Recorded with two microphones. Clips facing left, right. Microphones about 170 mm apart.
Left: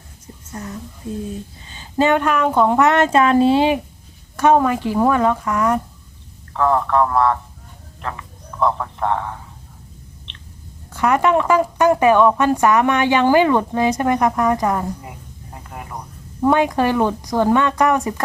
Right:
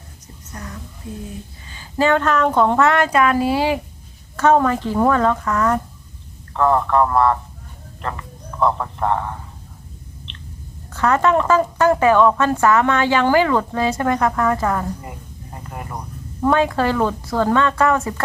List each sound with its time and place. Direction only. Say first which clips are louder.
0.5 s a woman's voice: left 4 dB; 25° left (ahead or behind)
4.4 s speech: left 1 dB; 10° left (ahead or behind)
6.5 s a man's voice: right 1 dB; centre (ahead or behind)
10.9 s speech: even; 15° left (ahead or behind)
15.5 s a sound: right 1 dB; centre (ahead or behind)
16.5 s speech: left 1 dB; 15° left (ahead or behind)